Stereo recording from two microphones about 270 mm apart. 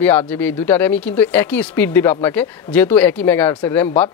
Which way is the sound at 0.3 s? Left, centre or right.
Centre.